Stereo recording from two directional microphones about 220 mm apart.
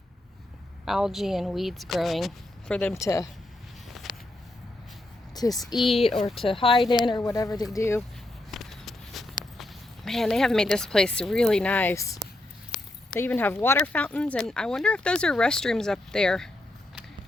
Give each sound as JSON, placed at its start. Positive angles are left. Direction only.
{"t": 0.9, "sound": "speech", "side_deg": 0}
{"t": 5.3, "sound": "speech", "side_deg": 15}
{"t": 5.7, "sound": "speech", "side_deg": 0}
{"t": 6.2, "sound": "speech", "side_deg": 25}
{"t": 8.4, "sound": "a sound", "side_deg": 0}
{"t": 9.6, "sound": "speech", "side_deg": 0}
{"t": 12.7, "sound": "a sound", "side_deg": 0}
{"t": 13.1, "sound": "speech", "side_deg": 10}